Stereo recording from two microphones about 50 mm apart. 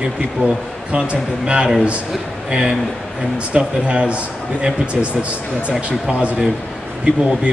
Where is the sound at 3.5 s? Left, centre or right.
Right.